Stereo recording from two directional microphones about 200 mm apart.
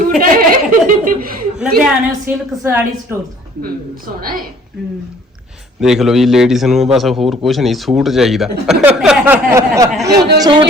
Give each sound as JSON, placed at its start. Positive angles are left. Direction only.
{"t": 0.2, "sound": "a sound", "side_deg": -45}
{"t": 1.5, "sound": "a woman's voice", "side_deg": -5}
{"t": 3.6, "sound": "a woman's voice", "side_deg": -45}
{"t": 5.8, "sound": "a man's voice", "side_deg": 0}